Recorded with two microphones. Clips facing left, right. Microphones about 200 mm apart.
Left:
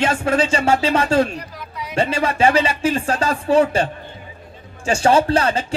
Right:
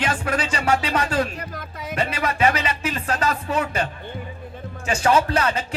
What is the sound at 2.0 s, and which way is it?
Speech, 30° left (ahead or behind).